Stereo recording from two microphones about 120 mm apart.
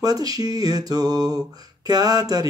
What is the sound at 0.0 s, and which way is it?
Mantra, 30° right (ahead or behind).